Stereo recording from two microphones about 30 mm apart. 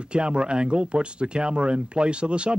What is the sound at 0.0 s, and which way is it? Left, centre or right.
Speech, right.